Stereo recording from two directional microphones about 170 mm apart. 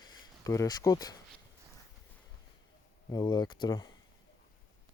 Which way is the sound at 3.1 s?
25° left (ahead or behind).